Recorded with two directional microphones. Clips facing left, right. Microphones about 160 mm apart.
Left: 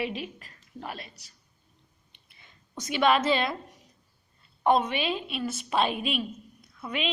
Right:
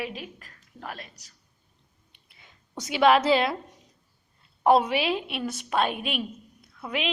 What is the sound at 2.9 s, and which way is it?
Speech, 90° right.